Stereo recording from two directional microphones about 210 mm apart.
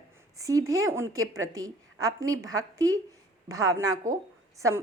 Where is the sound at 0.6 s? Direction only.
75° right (ahead or behind).